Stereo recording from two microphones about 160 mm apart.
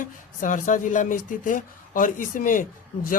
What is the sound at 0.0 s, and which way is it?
Speech, 55° left (ahead or behind).